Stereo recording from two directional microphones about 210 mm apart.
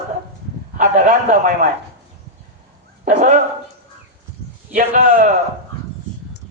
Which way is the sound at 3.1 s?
35° right (ahead or behind).